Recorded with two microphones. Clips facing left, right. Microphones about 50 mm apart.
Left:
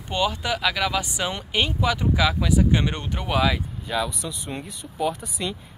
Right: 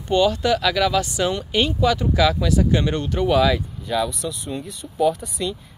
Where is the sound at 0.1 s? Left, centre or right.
Centre.